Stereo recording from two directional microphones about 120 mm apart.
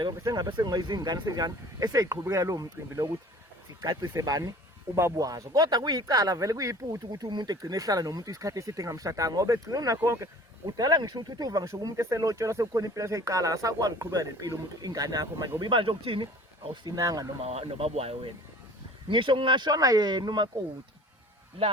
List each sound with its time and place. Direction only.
0.0 s speech: 30° right (ahead or behind)
4.1 s speech: 30° right (ahead or behind)
15.6 s speech: 45° right (ahead or behind)
16.8 s speech: 30° right (ahead or behind)
17.4 s speech: 60° right (ahead or behind)
19.0 s speech: 45° right (ahead or behind)
21.6 s speech: 50° right (ahead or behind)